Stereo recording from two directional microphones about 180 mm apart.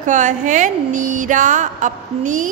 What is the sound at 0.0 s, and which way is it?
Speech, 45° right (ahead or behind).